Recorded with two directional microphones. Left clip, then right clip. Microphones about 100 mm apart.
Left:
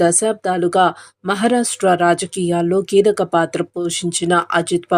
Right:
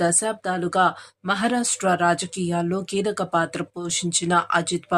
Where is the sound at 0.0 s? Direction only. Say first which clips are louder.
Left 7 dB; 40° left (ahead or behind).